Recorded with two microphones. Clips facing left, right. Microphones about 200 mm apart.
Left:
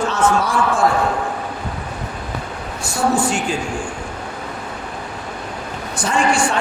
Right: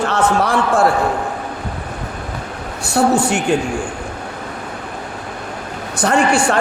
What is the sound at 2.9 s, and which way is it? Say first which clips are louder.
Speech: right 4 dB; 65° right (ahead or behind).